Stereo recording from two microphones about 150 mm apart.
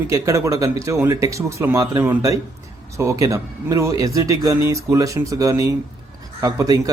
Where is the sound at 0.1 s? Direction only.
20° right (ahead or behind).